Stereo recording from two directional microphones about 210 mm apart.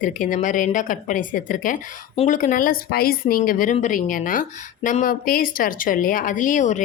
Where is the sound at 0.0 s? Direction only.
40° left (ahead or behind).